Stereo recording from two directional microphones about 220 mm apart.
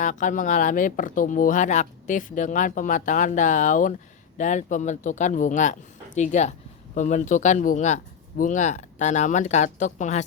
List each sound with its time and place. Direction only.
0.0 s speech: 35° left (ahead or behind)